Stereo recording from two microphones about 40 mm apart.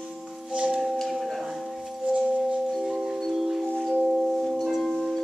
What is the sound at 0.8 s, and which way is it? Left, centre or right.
Singing bowl, centre.